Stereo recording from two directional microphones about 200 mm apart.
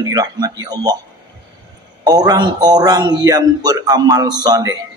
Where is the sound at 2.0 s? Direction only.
20° right (ahead or behind).